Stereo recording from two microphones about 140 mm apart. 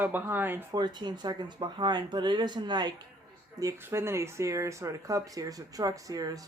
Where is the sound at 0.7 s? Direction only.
30° right (ahead or behind).